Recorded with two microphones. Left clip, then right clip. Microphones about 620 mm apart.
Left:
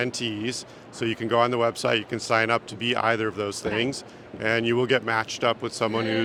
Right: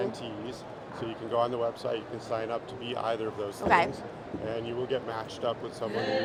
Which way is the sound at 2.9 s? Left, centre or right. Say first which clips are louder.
Left 6 dB; left.